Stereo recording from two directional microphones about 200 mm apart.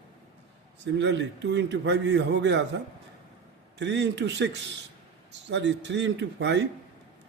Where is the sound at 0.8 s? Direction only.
60° right (ahead or behind).